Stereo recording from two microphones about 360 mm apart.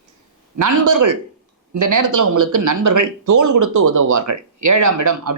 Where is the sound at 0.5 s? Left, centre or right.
Right.